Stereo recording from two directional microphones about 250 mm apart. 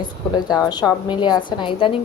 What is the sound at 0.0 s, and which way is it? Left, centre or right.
Speech, centre.